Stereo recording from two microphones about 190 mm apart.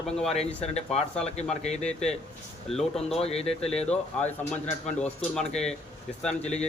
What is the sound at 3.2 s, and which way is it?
Speech, 30° left (ahead or behind).